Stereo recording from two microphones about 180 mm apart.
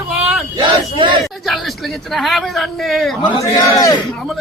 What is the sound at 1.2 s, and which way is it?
Speech, centre (ahead or behind).